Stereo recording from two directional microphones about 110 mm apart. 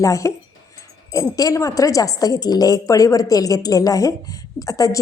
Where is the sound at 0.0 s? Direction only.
30° left (ahead or behind).